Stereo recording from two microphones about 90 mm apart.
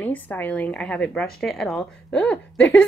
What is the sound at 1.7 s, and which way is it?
A woman's voice, 15° left (ahead or behind).